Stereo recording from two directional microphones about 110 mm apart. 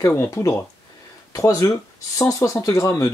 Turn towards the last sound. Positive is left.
turn(degrees=30)  # may be behind; listen again after turning